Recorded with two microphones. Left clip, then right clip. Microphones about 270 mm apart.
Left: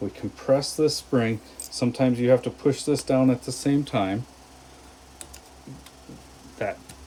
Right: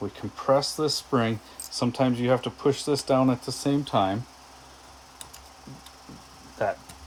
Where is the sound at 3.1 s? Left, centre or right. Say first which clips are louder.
Left 1 dB; right.